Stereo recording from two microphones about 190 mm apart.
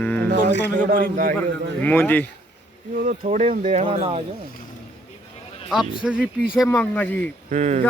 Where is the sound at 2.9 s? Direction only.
45° right (ahead or behind).